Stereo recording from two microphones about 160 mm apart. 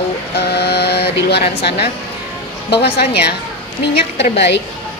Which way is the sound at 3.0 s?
90° left.